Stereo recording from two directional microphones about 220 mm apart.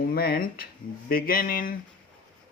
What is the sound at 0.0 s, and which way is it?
Speech, 45° left (ahead or behind).